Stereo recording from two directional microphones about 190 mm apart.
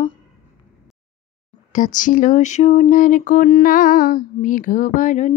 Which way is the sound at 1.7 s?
40° left (ahead or behind).